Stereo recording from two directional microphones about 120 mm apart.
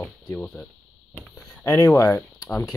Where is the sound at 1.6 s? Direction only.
20° left (ahead or behind).